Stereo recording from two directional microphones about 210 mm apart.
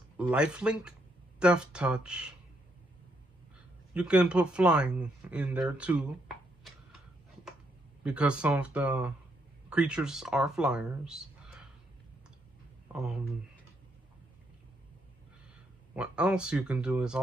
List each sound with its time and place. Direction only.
0.2 s speech: 5° right (ahead or behind)
3.9 s speech: 5° right (ahead or behind)
8.0 s speech: 5° right (ahead or behind)
12.8 s speech: 5° right (ahead or behind)
15.9 s speech: 5° right (ahead or behind)